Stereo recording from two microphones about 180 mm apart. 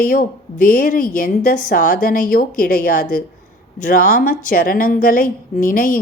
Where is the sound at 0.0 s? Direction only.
50° left (ahead or behind).